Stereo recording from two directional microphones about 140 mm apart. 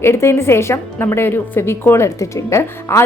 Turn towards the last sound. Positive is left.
turn(degrees=20)  # may be behind; listen again after turning